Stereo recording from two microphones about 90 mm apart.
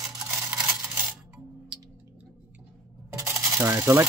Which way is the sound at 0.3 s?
20° right (ahead or behind).